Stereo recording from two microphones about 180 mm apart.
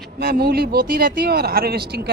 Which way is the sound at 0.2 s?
60° right (ahead or behind).